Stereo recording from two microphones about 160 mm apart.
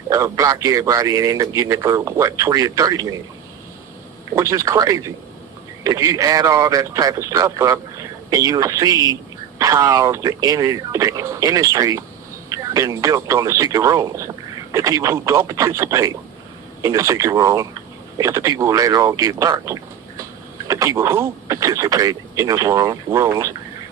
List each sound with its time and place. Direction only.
0.1 s a man's voice: 20° right (ahead or behind)
4.4 s a man's voice: 20° right (ahead or behind)